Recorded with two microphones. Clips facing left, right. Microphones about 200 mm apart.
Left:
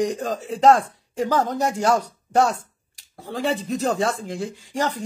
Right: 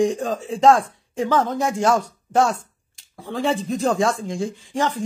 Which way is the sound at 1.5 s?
40° left (ahead or behind).